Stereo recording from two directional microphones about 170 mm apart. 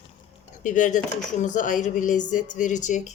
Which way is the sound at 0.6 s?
50° left (ahead or behind).